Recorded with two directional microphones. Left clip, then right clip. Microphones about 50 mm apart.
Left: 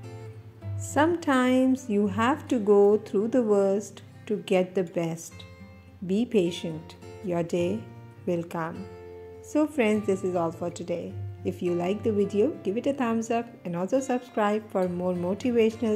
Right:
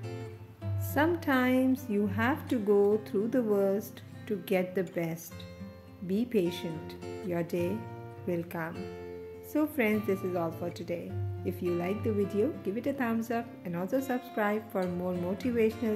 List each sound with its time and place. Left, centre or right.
0.9 s a woman's voice: left
2.5 s a woman's voice: left
6.0 s a woman's voice: left
9.5 s a woman's voice: left
11.8 s a woman's voice: left
12.1 s a woman's voice: left
15.3 s a woman's voice: left